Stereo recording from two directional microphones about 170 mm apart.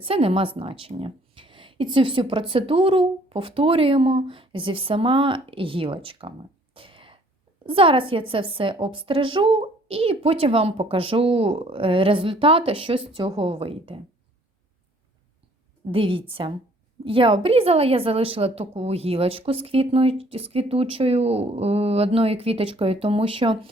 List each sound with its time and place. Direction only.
0.0 s a woman's voice: 35° right (ahead or behind)
6.7 s sneeze: 30° right (ahead or behind)
7.6 s a woman's voice: 30° right (ahead or behind)
15.9 s a woman's voice: 30° right (ahead or behind)